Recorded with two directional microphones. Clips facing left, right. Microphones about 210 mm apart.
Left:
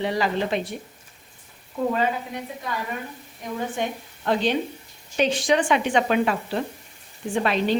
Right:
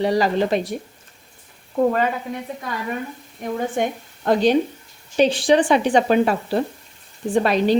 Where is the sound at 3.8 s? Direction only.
45° right (ahead or behind).